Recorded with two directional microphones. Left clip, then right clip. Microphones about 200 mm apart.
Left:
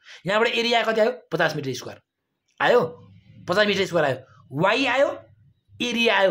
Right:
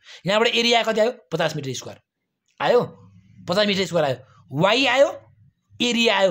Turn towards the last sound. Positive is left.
turn(degrees=-35)  # may be behind; listen again after turning